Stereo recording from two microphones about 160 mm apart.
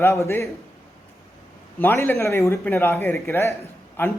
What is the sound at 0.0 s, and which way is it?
Speech, 15° left (ahead or behind).